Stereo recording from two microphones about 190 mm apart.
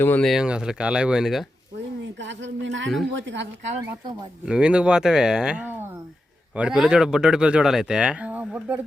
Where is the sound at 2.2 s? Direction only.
70° right (ahead or behind).